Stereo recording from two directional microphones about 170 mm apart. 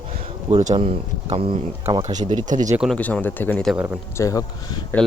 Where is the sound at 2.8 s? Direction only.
5° left (ahead or behind).